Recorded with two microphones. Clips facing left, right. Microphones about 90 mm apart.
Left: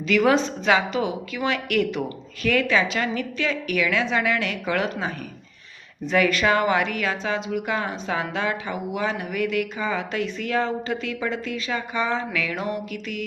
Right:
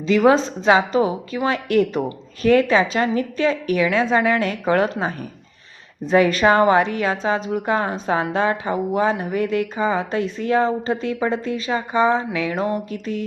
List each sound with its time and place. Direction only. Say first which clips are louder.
0.1 s a woman's voice: right 4 dB; 30° right (ahead or behind)